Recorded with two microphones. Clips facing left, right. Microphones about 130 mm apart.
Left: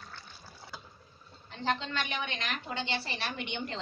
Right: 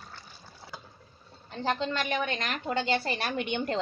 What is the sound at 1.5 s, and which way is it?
A woman's voice, 40° right (ahead or behind).